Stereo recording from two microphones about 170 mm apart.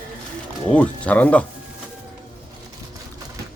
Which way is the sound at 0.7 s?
10° left (ahead or behind).